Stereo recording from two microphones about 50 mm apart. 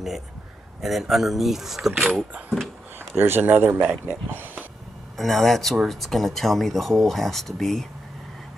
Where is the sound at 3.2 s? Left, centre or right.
Right.